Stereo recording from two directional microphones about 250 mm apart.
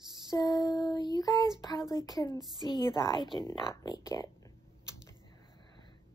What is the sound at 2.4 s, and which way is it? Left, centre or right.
Speech, centre.